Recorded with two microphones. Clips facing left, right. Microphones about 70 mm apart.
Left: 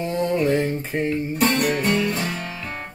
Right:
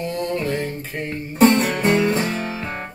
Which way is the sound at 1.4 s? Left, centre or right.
Right.